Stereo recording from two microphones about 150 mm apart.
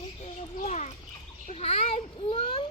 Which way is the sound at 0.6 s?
50° left (ahead or behind).